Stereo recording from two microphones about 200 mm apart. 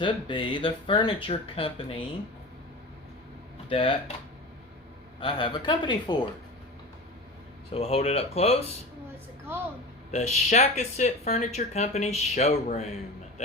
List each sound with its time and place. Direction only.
0.0 s speech: 25° left (ahead or behind)
3.7 s speech: 25° left (ahead or behind)
5.2 s speech: 25° left (ahead or behind)
7.7 s speech: 30° left (ahead or behind)
10.1 s speech: 35° left (ahead or behind)